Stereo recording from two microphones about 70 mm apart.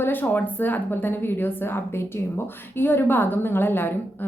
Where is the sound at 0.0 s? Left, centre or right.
Left.